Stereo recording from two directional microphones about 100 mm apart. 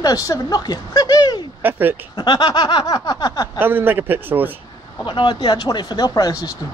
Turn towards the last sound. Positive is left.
turn(degrees=35)  # may be behind; listen again after turning